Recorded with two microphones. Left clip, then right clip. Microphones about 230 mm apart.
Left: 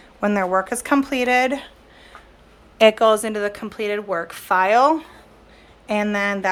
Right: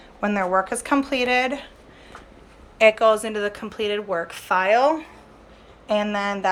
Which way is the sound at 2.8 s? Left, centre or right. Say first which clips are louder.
Left 2 dB; left.